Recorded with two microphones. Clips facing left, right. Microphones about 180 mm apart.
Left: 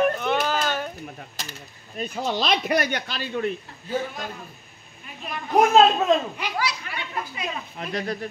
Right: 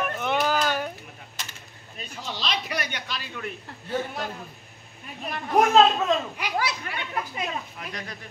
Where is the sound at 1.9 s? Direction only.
50° left (ahead or behind).